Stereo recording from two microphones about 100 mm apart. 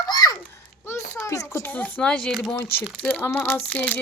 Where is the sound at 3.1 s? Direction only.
15° left (ahead or behind).